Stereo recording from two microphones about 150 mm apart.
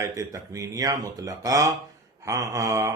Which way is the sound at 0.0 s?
20° right (ahead or behind).